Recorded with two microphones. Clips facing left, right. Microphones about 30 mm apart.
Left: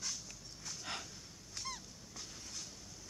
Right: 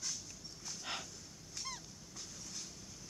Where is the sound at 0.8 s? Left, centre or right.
Centre.